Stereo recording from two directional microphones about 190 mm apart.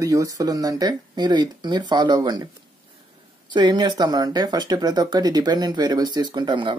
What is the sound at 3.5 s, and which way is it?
Speech, 25° right (ahead or behind).